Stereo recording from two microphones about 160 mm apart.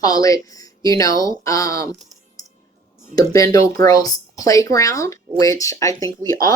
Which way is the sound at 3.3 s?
20° left (ahead or behind).